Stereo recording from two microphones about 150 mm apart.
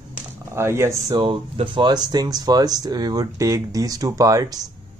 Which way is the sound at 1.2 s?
35° right (ahead or behind).